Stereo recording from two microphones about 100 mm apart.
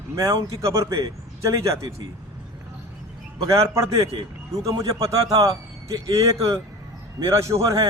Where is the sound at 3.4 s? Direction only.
30° right (ahead or behind).